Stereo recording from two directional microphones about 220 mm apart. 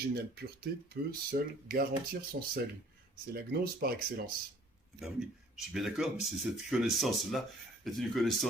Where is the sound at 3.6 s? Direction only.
45° right (ahead or behind).